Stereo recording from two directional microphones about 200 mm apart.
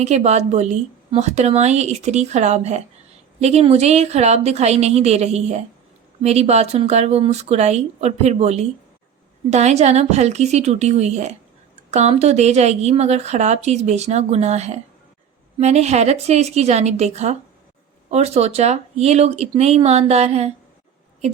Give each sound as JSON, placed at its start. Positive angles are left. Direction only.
{"t": 0.0, "sound": "speech", "side_deg": -35}